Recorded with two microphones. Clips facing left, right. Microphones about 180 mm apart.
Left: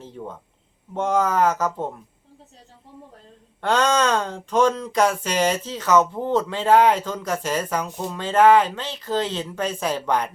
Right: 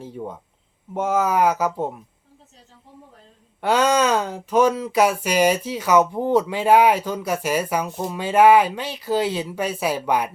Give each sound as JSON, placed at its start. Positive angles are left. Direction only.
{"t": 0.0, "sound": "speech", "side_deg": -10}
{"t": 3.6, "sound": "speech", "side_deg": -10}